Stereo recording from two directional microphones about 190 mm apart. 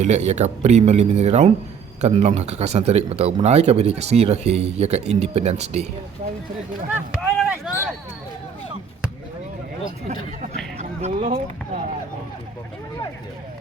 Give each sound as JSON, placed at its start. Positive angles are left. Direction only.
{"t": 0.0, "sound": "speech", "side_deg": -35}
{"t": 7.2, "sound": "a sound", "side_deg": 0}
{"t": 9.8, "sound": "speech", "side_deg": -35}